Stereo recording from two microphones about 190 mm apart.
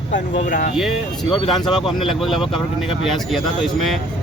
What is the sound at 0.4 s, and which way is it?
Speech, 45° left (ahead or behind).